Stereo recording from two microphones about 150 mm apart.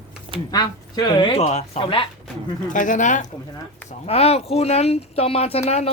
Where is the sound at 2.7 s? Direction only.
60° left (ahead or behind).